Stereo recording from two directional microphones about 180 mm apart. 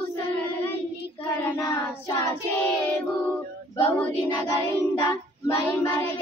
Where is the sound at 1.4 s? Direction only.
15° left (ahead or behind).